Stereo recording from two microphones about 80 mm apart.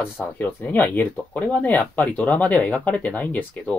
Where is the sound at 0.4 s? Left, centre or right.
Left.